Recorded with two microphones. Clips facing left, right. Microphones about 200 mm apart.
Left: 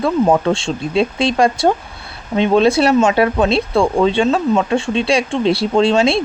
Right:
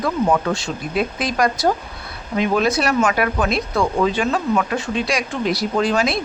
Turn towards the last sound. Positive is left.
turn(degrees=30)  # may be behind; listen again after turning